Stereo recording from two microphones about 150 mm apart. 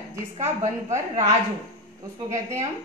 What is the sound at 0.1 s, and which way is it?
Speech, 20° right (ahead or behind).